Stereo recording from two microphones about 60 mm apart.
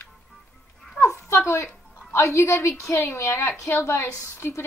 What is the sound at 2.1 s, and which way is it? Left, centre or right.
A woman's voice, left.